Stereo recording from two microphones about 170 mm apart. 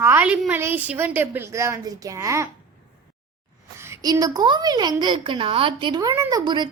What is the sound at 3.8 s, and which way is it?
A woman's voice, 20° right (ahead or behind).